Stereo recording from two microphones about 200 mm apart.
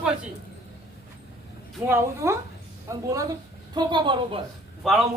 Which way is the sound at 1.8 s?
10° right (ahead or behind).